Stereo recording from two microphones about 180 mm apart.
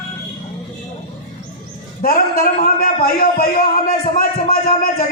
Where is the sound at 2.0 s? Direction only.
50° left (ahead or behind).